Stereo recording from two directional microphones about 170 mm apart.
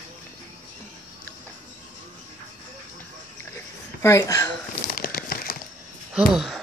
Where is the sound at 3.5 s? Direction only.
15° left (ahead or behind).